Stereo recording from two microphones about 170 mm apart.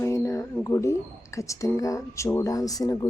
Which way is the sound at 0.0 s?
15° left (ahead or behind).